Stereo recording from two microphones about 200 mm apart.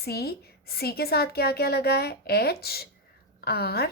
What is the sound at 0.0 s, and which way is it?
A woman's voice, 50° left (ahead or behind).